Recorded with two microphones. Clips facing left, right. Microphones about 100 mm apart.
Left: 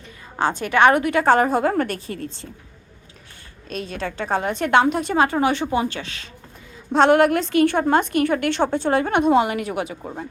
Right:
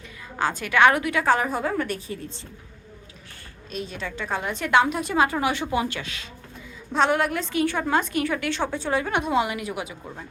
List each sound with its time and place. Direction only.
0.3 s a woman's voice: 25° left (ahead or behind)
0.9 s a woman's voice: 50° left (ahead or behind)
1.9 s a woman's voice: 65° left (ahead or behind)
3.7 s a woman's voice: 45° left (ahead or behind)
4.8 s a woman's voice: 30° left (ahead or behind)
6.9 s a woman's voice: 70° left (ahead or behind); by 10.0 s 55° left (ahead or behind)